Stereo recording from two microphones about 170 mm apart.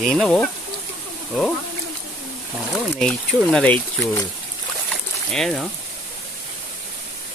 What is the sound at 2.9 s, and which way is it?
Speech, 5° left (ahead or behind).